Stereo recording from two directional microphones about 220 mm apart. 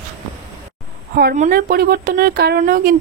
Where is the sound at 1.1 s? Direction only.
40° right (ahead or behind).